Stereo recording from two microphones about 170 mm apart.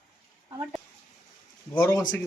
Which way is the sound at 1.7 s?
20° left (ahead or behind).